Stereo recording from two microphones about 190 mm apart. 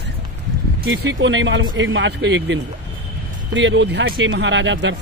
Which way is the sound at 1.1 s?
80° right.